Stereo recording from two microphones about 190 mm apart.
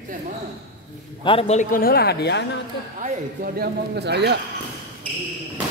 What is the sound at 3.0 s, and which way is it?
Speech, 45° right (ahead or behind).